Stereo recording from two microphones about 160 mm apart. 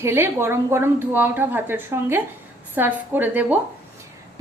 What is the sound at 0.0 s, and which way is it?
A woman's voice, 15° right (ahead or behind).